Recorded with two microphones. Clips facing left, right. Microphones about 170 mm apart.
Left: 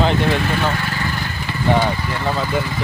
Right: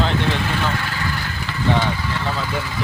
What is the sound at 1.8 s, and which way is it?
Speech, 15° left (ahead or behind).